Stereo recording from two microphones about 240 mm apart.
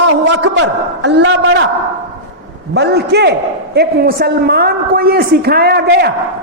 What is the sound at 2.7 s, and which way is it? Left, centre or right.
A man's voice, right.